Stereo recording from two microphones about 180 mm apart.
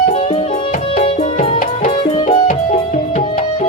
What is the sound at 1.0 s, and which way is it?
Music, 35° left (ahead or behind).